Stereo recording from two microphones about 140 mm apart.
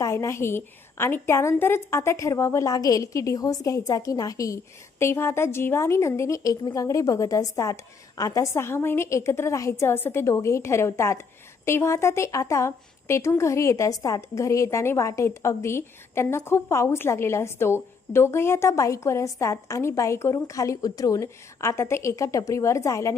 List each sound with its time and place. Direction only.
0.0 s a woman's voice: 20° left (ahead or behind)